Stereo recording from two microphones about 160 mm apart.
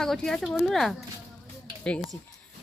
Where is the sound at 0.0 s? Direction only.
5° left (ahead or behind).